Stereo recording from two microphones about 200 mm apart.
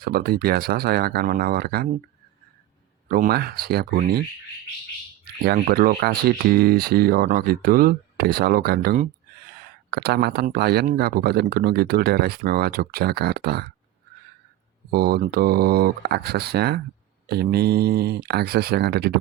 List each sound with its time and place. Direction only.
0.0 s speech: 50° right (ahead or behind)
3.1 s speech: 50° right (ahead or behind)
5.5 s speech: 45° right (ahead or behind)
14.8 s speech: 50° right (ahead or behind)